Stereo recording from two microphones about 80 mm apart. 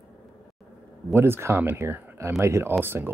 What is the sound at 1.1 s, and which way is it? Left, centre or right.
Speech, right.